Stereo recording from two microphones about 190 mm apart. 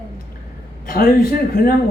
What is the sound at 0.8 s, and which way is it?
Speech, 50° left (ahead or behind).